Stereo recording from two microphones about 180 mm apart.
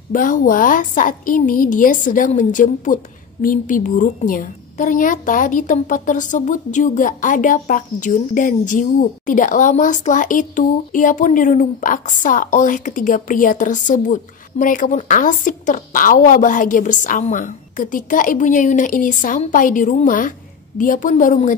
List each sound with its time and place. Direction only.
0.1 s a woman's voice: 50° left (ahead or behind)